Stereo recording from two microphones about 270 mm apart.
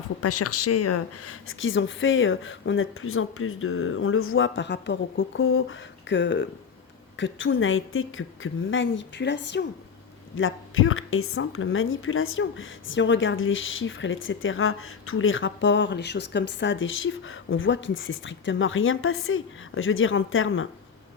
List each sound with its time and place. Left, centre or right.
0.2 s a woman's voice: left